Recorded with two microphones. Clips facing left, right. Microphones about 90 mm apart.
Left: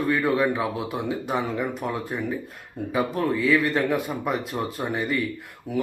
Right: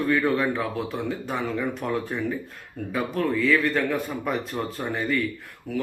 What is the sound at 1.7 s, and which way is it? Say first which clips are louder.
Speech: right 1 dB; 5° left (ahead or behind).